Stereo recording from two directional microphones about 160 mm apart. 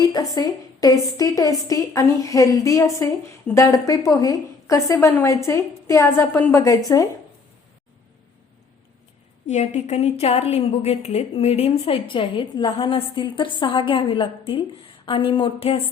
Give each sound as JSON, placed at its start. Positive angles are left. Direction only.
{"t": 0.0, "sound": "a woman's voice", "side_deg": 25}
{"t": 9.5, "sound": "a woman's voice", "side_deg": 45}